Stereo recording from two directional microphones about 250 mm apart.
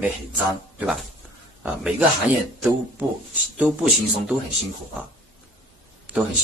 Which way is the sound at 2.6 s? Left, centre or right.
Centre.